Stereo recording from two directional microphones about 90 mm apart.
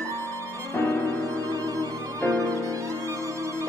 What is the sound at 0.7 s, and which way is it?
Music, 30° left (ahead or behind).